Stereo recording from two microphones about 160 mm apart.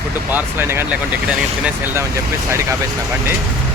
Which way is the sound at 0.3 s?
15° right (ahead or behind).